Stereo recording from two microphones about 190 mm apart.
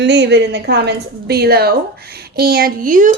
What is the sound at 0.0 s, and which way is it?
A woman's voice, 65° right (ahead or behind).